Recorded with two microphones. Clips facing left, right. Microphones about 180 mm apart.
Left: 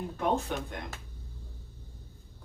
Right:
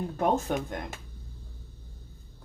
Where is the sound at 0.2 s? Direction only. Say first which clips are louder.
Right 3 dB; 45° right (ahead or behind).